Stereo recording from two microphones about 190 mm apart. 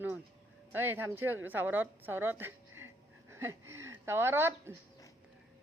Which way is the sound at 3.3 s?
15° right (ahead or behind).